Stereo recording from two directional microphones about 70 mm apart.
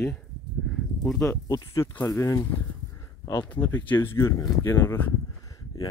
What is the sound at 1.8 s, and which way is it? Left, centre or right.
Speech, left.